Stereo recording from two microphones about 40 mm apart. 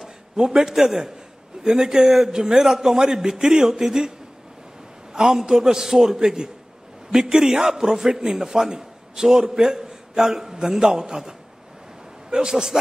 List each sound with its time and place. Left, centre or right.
0.0 s a man's voice: centre
5.1 s a man's voice: centre